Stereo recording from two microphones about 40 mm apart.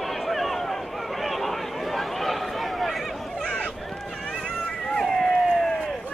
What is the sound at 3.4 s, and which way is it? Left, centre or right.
Run, left.